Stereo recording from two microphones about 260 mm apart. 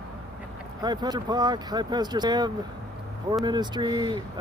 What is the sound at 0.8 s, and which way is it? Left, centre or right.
Speech, centre.